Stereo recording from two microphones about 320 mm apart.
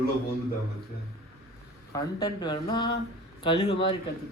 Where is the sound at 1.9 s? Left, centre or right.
Centre.